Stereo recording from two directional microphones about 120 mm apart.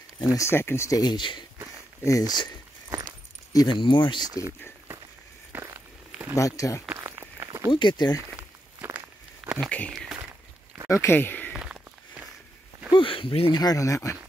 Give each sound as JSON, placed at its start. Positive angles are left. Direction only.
{"t": 0.3, "sound": "speech", "side_deg": 20}
{"t": 5.5, "sound": "walk", "side_deg": -25}
{"t": 6.3, "sound": "speech", "side_deg": 25}
{"t": 7.0, "sound": "walk", "side_deg": -25}
{"t": 7.7, "sound": "speech", "side_deg": 35}
{"t": 8.8, "sound": "walk", "side_deg": -10}
{"t": 9.6, "sound": "speech", "side_deg": 10}
{"t": 9.9, "sound": "a sound", "side_deg": -5}
{"t": 10.9, "sound": "speech", "side_deg": 20}
{"t": 11.5, "sound": "a sound", "side_deg": -10}
{"t": 12.9, "sound": "speech", "side_deg": 45}
{"t": 13.6, "sound": "speech", "side_deg": 30}